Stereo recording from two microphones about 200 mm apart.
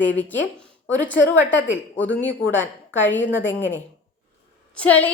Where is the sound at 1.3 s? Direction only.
70° left (ahead or behind).